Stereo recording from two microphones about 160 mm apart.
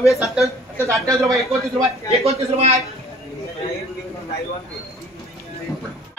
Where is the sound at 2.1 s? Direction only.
40° right (ahead or behind).